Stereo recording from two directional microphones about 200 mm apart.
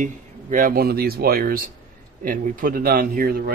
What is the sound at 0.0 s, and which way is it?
Speech, 40° right (ahead or behind).